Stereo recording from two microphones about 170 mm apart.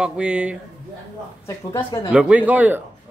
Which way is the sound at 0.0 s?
5° right (ahead or behind).